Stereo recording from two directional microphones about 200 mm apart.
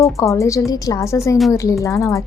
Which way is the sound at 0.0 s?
15° left (ahead or behind).